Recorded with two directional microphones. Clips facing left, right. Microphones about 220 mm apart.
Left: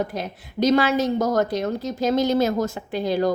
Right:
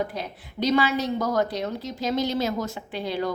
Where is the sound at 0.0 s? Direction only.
45° left (ahead or behind).